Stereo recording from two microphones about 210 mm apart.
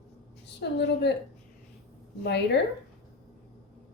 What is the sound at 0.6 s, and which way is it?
Speech, 55° left (ahead or behind).